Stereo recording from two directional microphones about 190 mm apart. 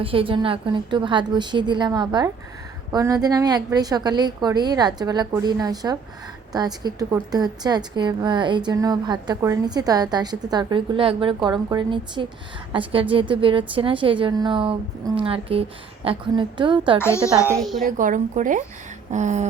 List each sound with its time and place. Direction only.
0.0 s a woman's voice: 30° right (ahead or behind)
17.0 s speech: 15° left (ahead or behind)
17.6 s a woman's voice: centre (ahead or behind)
17.8 s speech: 45° right (ahead or behind)
19.1 s a sound: 40° right (ahead or behind)